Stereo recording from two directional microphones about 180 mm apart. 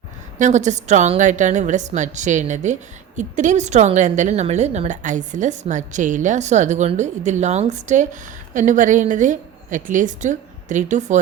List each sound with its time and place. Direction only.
0.3 s a woman's voice: 40° right (ahead or behind)